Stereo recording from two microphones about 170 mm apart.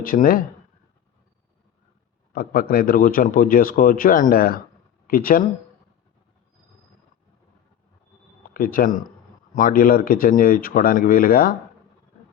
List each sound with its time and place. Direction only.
0.0 s speech: 55° left (ahead or behind)
2.3 s speech: 60° left (ahead or behind)
8.5 s speech: 55° left (ahead or behind)